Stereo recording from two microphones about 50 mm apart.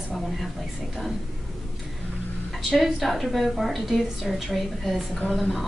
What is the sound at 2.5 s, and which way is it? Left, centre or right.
A woman's voice, centre.